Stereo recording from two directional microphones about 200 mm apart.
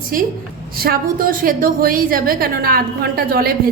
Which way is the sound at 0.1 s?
45° right (ahead or behind).